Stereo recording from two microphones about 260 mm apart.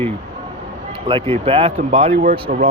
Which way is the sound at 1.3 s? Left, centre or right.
Right.